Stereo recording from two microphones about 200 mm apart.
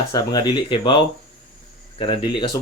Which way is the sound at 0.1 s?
20° left (ahead or behind).